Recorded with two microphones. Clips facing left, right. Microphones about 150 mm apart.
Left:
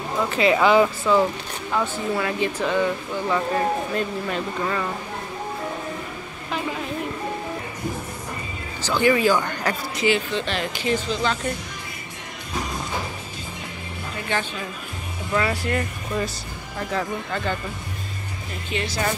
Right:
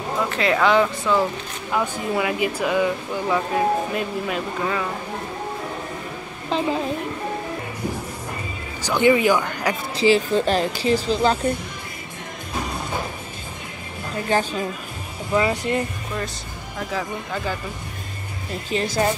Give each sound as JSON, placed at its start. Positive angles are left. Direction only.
{"t": 0.3, "sound": "speech", "side_deg": 0}
{"t": 1.7, "sound": "speech", "side_deg": -10}
{"t": 8.8, "sound": "speech", "side_deg": -20}
{"t": 9.9, "sound": "speech", "side_deg": -35}
{"t": 14.3, "sound": "speech", "side_deg": -40}
{"t": 15.3, "sound": "speech", "side_deg": -20}
{"t": 16.7, "sound": "speech", "side_deg": -5}
{"t": 18.7, "sound": "speech", "side_deg": -35}